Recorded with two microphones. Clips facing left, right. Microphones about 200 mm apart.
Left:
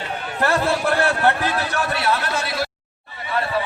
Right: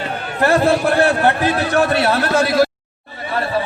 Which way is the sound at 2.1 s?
40° right (ahead or behind).